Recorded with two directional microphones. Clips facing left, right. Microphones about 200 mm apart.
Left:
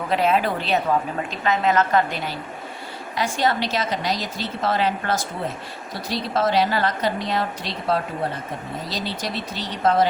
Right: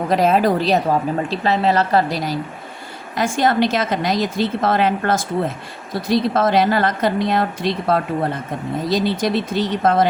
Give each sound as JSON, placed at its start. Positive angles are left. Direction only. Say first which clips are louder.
{"t": 0.1, "sound": "a woman's voice", "louder": "right 5 dB", "side_deg": -40}